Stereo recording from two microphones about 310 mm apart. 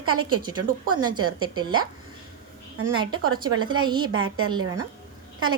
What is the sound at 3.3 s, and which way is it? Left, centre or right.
Speech, centre.